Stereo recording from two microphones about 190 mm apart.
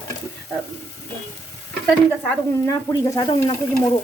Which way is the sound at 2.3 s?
15° left (ahead or behind).